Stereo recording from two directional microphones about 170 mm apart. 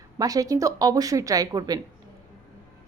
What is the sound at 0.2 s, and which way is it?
A woman's voice, 20° right (ahead or behind).